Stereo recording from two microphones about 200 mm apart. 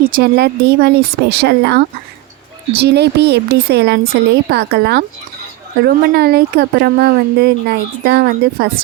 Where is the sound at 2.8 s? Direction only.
55° right (ahead or behind).